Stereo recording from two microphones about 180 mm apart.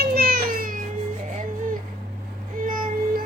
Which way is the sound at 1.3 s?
45° right (ahead or behind).